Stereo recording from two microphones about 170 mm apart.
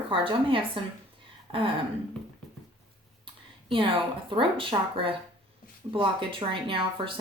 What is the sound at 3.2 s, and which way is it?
A woman's voice, 30° right (ahead or behind).